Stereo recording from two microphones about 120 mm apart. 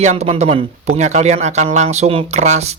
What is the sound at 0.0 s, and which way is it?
Speech, 70° right (ahead or behind).